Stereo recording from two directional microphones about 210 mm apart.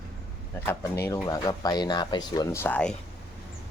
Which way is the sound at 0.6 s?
10° left (ahead or behind).